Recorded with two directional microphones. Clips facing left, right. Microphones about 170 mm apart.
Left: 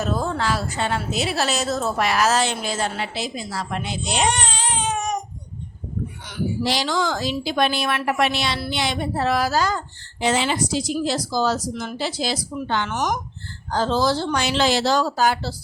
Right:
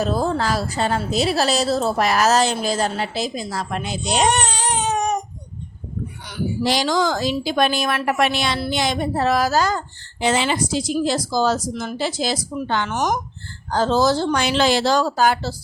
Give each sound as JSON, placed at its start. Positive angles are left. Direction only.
{"t": 0.0, "sound": "a woman's voice", "side_deg": -35}
{"t": 6.7, "sound": "speech", "side_deg": -45}
{"t": 10.2, "sound": "speech", "side_deg": -70}